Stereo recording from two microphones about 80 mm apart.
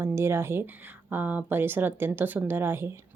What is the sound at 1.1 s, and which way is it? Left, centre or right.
Speech, right.